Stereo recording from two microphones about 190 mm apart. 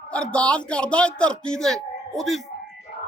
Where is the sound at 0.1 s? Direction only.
5° left (ahead or behind).